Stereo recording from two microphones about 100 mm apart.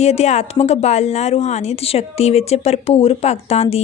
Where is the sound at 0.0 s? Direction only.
90° left.